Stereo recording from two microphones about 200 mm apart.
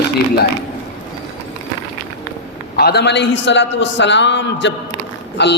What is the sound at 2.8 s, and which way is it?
A man's voice, 50° left (ahead or behind).